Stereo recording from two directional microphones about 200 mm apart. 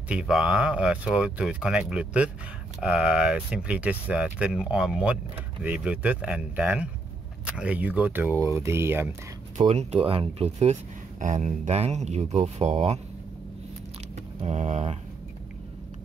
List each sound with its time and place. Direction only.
0.1 s speech: 5° right (ahead or behind)
9.6 s speech: 35° right (ahead or behind)
14.4 s speech: 35° right (ahead or behind)